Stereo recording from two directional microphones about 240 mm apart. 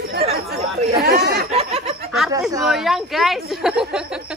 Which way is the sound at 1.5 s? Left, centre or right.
Right.